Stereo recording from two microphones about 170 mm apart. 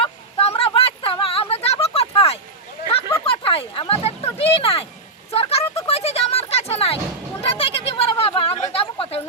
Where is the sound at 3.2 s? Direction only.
35° left (ahead or behind).